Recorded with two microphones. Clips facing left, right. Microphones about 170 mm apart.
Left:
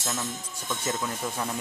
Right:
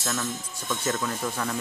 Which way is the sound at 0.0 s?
20° left (ahead or behind).